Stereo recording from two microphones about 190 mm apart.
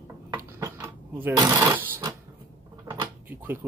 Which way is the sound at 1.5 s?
10° right (ahead or behind).